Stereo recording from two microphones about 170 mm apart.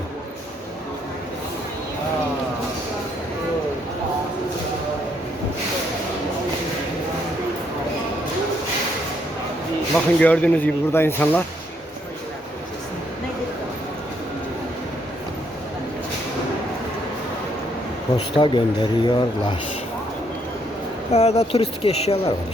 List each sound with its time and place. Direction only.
10.2 s speech: 5° left (ahead or behind)
18.3 s speech: 30° left (ahead or behind)
21.1 s speech: 40° left (ahead or behind)